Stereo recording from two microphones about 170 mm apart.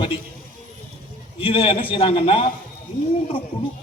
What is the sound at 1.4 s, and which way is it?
A man's voice, 30° left (ahead or behind).